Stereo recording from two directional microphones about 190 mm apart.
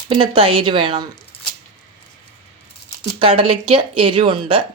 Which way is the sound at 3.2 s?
30° right (ahead or behind).